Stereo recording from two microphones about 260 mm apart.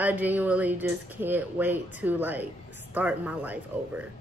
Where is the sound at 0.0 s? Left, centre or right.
Centre.